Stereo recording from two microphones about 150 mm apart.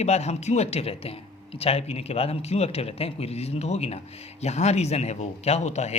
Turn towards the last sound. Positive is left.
turn(degrees=50)  # may be behind; listen again after turning